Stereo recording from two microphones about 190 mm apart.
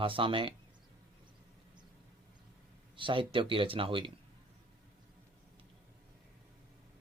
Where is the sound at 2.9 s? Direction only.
25° right (ahead or behind).